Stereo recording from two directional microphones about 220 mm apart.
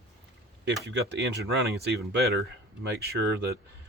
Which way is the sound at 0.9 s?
50° right (ahead or behind).